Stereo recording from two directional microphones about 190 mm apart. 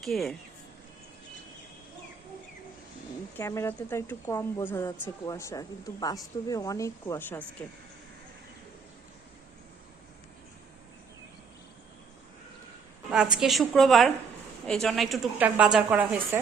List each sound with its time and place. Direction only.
0.0 s a woman's voice: centre (ahead or behind)
3.3 s speech: 15° left (ahead or behind)
13.3 s a woman's voice: centre (ahead or behind)